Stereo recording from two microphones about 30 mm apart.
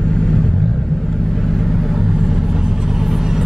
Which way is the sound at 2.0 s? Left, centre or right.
Centre.